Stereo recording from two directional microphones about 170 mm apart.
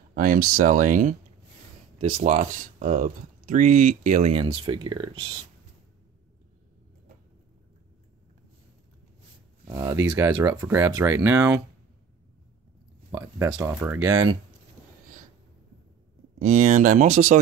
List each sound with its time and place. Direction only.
0.1 s speech: 55° right (ahead or behind)
2.1 s speech: 45° right (ahead or behind)
4.6 s speech: 30° right (ahead or behind)
9.7 s speech: 20° right (ahead or behind)
13.1 s speech: 15° right (ahead or behind)
16.3 s speech: 50° right (ahead or behind)